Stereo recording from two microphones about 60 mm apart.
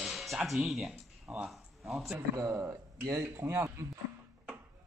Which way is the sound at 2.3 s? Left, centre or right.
Right.